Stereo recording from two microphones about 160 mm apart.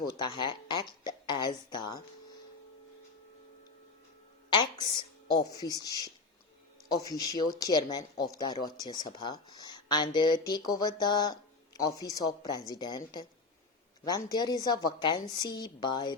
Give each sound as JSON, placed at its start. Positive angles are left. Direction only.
{"t": 0.2, "sound": "speech", "side_deg": 30}
{"t": 4.4, "sound": "a woman's voice", "side_deg": 30}
{"t": 14.0, "sound": "speech", "side_deg": 25}